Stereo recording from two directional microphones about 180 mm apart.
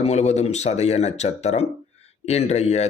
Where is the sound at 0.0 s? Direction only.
35° left (ahead or behind).